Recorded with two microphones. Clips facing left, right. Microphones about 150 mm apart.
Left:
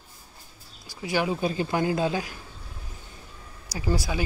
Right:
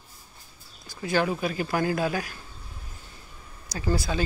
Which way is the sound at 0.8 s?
15° left (ahead or behind).